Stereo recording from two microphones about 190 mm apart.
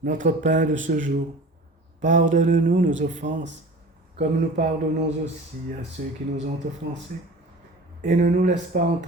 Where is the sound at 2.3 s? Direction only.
45° right (ahead or behind).